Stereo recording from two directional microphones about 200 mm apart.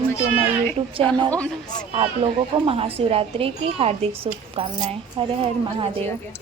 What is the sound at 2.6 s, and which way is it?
Speech, 30° right (ahead or behind).